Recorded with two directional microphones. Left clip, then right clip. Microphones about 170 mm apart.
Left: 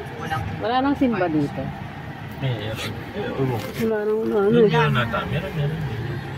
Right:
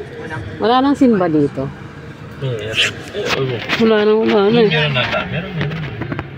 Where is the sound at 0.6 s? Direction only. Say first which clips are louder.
Right 9 dB; 75° right (ahead or behind).